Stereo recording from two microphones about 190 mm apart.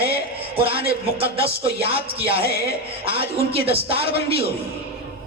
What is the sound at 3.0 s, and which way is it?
A man's voice, 30° right (ahead or behind).